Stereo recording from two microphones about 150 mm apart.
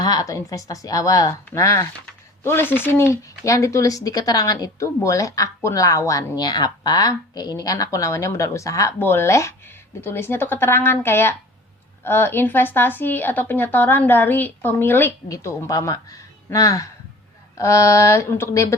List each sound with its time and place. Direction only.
0.0 s speech: 25° left (ahead or behind)